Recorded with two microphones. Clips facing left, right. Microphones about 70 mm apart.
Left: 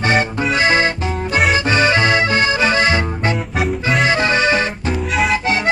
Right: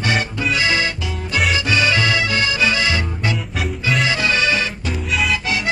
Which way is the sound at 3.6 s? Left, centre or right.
Left.